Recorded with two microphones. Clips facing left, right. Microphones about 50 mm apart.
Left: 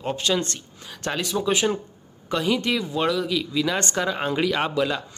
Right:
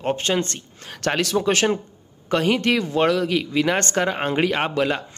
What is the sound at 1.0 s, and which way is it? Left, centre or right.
Speech, right.